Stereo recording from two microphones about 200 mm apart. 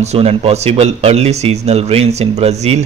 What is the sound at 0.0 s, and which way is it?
A man's voice, 30° right (ahead or behind).